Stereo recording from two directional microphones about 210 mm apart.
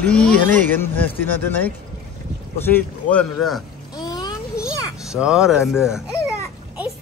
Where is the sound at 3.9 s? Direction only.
20° left (ahead or behind).